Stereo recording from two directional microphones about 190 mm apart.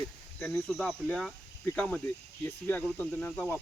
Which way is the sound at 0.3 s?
10° left (ahead or behind).